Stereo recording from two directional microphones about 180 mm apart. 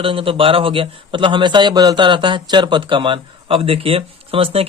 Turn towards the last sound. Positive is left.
turn(degrees=-30)  # may be behind; listen again after turning